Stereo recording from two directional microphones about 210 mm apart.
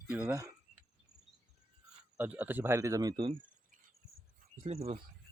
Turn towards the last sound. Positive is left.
turn(degrees=-30)  # may be behind; listen again after turning